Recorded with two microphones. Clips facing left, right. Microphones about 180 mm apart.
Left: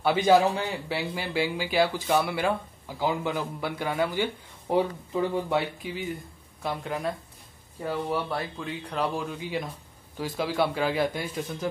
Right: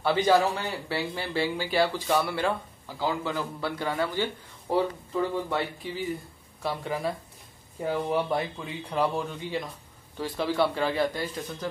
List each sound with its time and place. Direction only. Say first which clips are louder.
0.0 s speech: left 2 dB; 10° left (ahead or behind)
5.8 s speech: right 1 dB; centre (ahead or behind)
8.1 s speech: right 3 dB; 20° right (ahead or behind)
8.5 s speech: right 2 dB; 5° right (ahead or behind)